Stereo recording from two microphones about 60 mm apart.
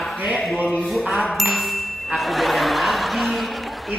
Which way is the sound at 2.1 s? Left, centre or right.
Centre.